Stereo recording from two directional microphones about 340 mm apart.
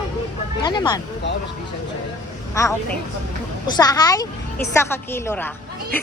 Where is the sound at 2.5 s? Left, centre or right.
Centre.